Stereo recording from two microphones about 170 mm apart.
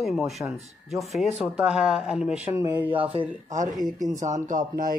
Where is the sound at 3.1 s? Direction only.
40° right (ahead or behind).